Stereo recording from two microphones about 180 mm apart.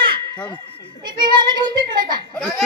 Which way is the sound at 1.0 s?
25° right (ahead or behind).